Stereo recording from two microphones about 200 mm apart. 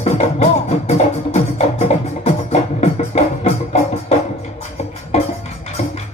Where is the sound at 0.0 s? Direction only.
35° left (ahead or behind).